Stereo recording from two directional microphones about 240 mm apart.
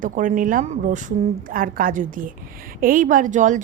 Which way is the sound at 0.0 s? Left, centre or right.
Right.